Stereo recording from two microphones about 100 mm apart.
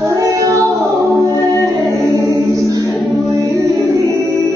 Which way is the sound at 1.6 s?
30° right (ahead or behind).